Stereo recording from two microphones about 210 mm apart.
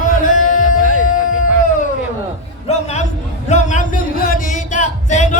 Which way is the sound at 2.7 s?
30° left (ahead or behind).